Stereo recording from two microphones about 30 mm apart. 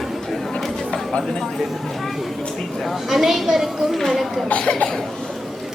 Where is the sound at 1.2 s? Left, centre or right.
Centre.